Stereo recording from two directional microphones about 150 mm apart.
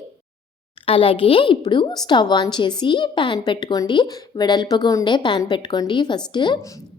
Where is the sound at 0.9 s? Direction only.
35° left (ahead or behind).